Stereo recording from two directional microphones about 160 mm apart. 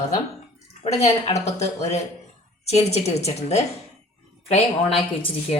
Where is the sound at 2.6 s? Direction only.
40° left (ahead or behind).